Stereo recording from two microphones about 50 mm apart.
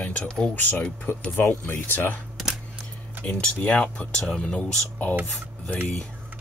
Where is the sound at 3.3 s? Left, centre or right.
Left.